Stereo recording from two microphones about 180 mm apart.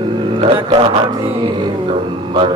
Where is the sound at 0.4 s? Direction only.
30° right (ahead or behind).